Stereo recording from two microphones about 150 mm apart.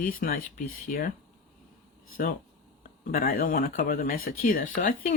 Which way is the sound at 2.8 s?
75° left (ahead or behind).